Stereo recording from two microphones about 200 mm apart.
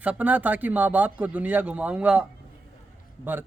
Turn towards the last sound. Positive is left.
turn(degrees=-10)  # may be behind; listen again after turning